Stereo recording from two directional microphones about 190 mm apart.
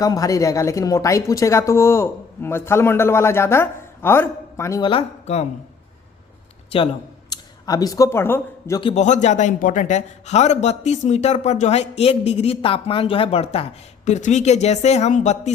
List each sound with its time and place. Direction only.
0.0 s speech: 20° left (ahead or behind)
4.8 s a man's voice: 30° left (ahead or behind)
6.7 s speech: 30° left (ahead or behind); by 8.8 s 15° left (ahead or behind)
8.8 s a man's voice: 35° left (ahead or behind)